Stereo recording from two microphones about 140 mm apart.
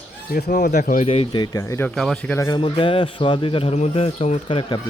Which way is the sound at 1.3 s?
25° left (ahead or behind).